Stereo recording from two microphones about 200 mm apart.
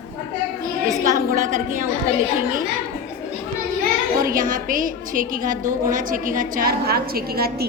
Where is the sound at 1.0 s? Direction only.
40° right (ahead or behind).